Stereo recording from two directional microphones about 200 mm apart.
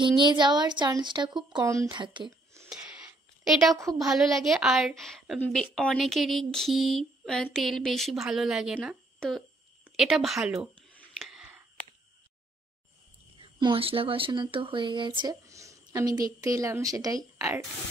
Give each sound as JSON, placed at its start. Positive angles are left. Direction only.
{"t": 0.0, "sound": "speech", "side_deg": -25}
{"t": 3.4, "sound": "a woman's voice", "side_deg": 0}
{"t": 11.0, "sound": "a sound", "side_deg": 0}
{"t": 13.4, "sound": "speech", "side_deg": -25}